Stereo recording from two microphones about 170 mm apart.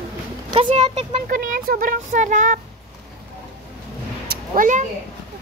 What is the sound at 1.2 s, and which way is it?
Speech, 55° right (ahead or behind).